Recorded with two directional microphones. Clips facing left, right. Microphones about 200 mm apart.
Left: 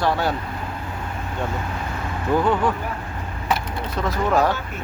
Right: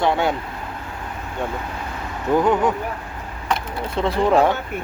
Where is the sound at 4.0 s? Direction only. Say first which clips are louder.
Right 4 dB; 30° right (ahead or behind).